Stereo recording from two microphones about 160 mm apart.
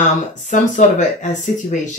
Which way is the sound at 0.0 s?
50° left (ahead or behind).